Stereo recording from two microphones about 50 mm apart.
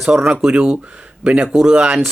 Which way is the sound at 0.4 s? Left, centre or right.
Centre.